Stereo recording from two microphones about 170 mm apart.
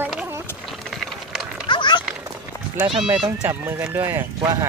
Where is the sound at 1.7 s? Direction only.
30° left (ahead or behind).